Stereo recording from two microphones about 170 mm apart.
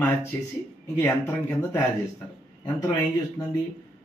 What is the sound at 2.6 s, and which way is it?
Speech, 20° left (ahead or behind).